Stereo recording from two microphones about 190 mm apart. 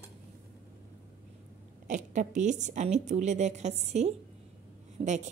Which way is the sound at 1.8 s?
40° right (ahead or behind).